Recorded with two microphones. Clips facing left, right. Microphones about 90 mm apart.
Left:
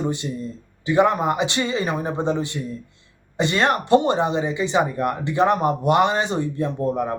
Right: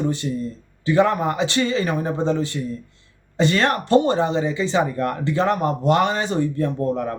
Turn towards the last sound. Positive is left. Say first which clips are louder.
# even
turn(degrees=20)  # may be behind; listen again after turning